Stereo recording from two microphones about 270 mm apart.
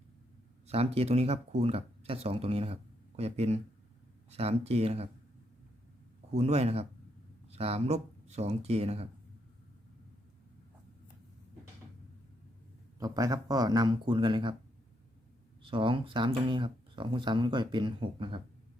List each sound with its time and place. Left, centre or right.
0.7 s speech: right
6.3 s speech: right
13.0 s speech: centre
15.6 s speech: centre